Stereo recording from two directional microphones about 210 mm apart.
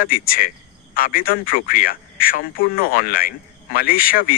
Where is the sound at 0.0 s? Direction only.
40° left (ahead or behind).